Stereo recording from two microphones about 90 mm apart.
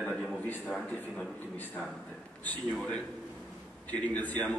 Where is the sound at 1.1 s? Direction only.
20° left (ahead or behind).